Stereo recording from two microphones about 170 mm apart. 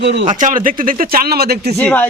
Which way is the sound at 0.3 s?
50° right (ahead or behind).